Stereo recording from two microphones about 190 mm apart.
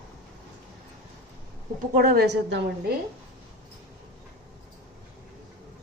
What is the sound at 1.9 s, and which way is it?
A woman's voice, 55° right (ahead or behind).